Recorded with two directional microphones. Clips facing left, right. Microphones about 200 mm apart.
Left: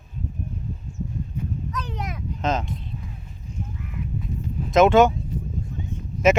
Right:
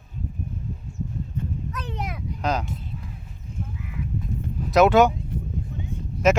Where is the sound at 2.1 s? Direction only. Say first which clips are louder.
Left 1 dB; 5° right (ahead or behind).